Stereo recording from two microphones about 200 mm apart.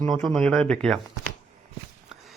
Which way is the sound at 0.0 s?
5° left (ahead or behind).